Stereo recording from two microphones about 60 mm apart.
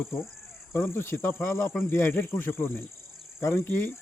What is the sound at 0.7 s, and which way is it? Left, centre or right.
Speech, left.